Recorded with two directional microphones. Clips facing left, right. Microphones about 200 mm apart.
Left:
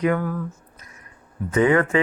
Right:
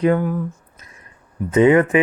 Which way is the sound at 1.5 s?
20° right (ahead or behind).